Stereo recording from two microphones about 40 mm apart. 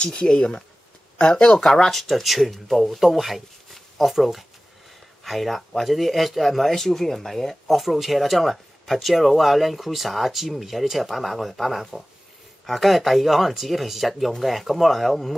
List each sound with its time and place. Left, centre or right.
0.0 s speech: left
1.1 s a sound: left
1.4 s speech: centre
1.9 s speech: centre
6.7 s speech: centre
7.6 s speech: centre